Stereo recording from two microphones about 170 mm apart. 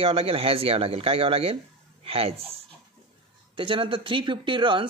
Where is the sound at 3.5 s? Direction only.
30° right (ahead or behind).